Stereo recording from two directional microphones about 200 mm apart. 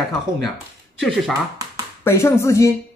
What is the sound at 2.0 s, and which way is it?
Speech, 10° left (ahead or behind).